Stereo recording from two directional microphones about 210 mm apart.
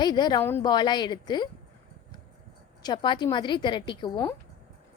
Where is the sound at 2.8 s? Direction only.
20° left (ahead or behind).